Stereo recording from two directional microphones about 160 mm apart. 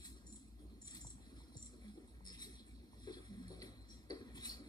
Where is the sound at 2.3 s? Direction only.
25° left (ahead or behind).